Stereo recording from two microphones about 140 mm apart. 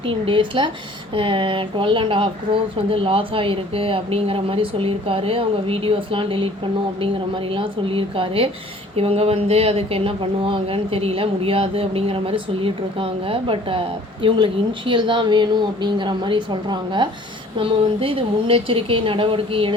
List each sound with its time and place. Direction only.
0.0 s speech: 40° right (ahead or behind)
7.5 s speech: 40° right (ahead or behind)